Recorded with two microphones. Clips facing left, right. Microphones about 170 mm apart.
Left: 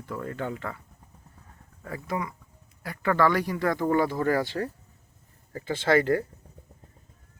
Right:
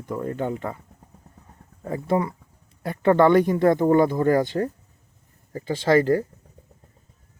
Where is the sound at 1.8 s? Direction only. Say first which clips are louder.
Right 9 dB; 30° right (ahead or behind).